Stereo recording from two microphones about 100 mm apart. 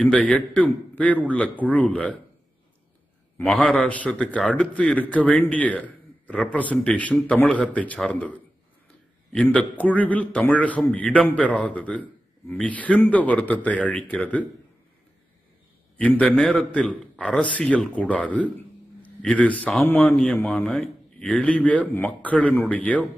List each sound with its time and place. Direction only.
0.0 s a man's voice: 15° left (ahead or behind)
3.3 s a man's voice: 15° left (ahead or behind)
16.0 s a man's voice: 15° left (ahead or behind)
20.4 s a man's voice: 5° left (ahead or behind)